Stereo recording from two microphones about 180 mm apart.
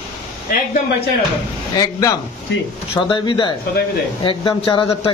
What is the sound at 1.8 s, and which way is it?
Speech, 20° left (ahead or behind).